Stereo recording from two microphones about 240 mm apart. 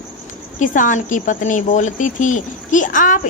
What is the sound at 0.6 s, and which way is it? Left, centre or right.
Speech, left.